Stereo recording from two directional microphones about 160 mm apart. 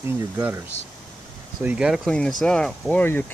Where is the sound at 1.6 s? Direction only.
5° right (ahead or behind).